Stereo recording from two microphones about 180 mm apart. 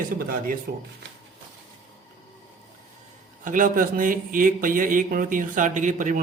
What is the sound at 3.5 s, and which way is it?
A man's voice, 50° right (ahead or behind).